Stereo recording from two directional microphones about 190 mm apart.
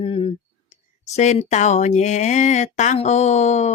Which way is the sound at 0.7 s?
35° left (ahead or behind).